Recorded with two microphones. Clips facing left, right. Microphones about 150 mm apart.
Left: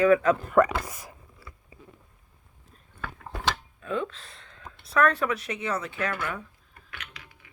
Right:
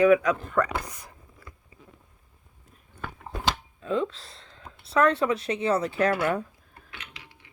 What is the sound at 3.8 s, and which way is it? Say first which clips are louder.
Speech: right 3 dB; 25° right (ahead or behind).